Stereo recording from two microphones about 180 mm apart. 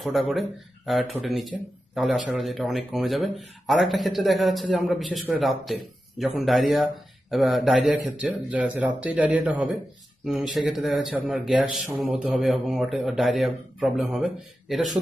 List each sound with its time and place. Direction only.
0.0 s a man's voice: centre (ahead or behind)